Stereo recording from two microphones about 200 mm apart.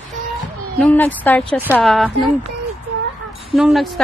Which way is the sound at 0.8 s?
10° left (ahead or behind).